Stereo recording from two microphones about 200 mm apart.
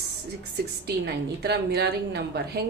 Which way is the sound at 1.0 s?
55° right (ahead or behind).